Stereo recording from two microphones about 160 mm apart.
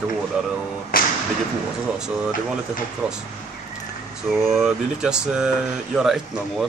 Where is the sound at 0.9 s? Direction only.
65° left (ahead or behind).